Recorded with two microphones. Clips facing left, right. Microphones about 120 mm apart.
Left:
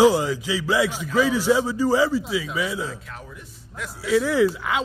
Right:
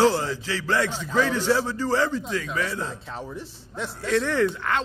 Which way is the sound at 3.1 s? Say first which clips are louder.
Right 6 dB; 30° right (ahead or behind).